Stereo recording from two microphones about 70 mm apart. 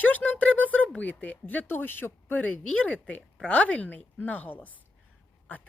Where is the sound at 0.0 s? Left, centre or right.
Left.